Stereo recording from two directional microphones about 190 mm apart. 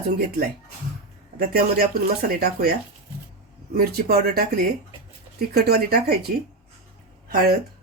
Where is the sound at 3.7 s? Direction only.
55° right (ahead or behind).